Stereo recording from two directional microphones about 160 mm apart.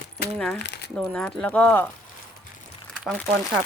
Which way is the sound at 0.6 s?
90° left.